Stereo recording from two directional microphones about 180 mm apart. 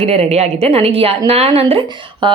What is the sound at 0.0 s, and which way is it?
A woman's voice, 35° right (ahead or behind).